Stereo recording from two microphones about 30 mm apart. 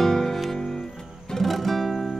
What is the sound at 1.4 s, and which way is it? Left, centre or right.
Music, centre.